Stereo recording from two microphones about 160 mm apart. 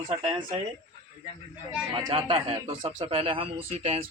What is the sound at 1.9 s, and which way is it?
A man's voice, 35° right (ahead or behind).